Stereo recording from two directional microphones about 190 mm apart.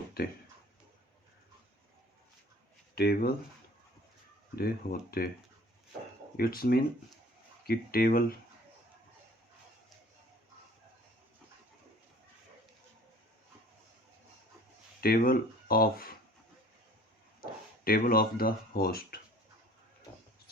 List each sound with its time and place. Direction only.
0.2 s speech: 50° left (ahead or behind)
2.9 s speech: 55° left (ahead or behind)
4.5 s speech: 50° left (ahead or behind)
6.3 s speech: 50° left (ahead or behind)
15.0 s speech: 50° left (ahead or behind)
17.4 s speech: 50° left (ahead or behind)